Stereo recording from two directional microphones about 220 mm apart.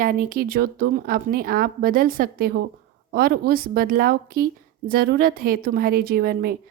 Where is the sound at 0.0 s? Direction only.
40° right (ahead or behind).